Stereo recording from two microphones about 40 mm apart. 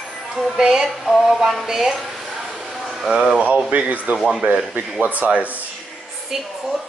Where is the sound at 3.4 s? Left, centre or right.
Right.